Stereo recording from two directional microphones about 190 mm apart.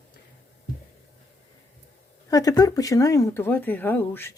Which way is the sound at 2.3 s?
20° left (ahead or behind).